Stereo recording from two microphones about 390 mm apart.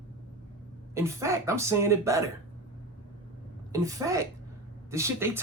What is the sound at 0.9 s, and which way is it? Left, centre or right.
Speech, centre.